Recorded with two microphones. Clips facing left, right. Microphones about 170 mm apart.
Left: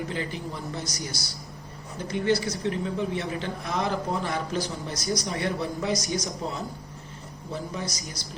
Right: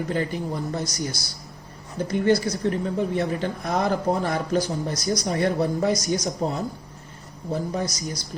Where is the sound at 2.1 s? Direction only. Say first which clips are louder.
Right 4 dB; 45° right (ahead or behind).